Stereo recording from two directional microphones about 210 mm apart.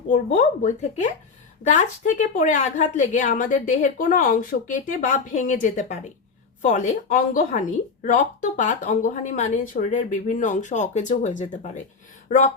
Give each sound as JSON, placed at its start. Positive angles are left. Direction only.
{"t": 0.1, "sound": "a woman's voice", "side_deg": 35}